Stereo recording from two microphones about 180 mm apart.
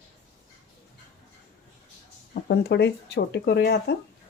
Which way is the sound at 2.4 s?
65° left (ahead or behind).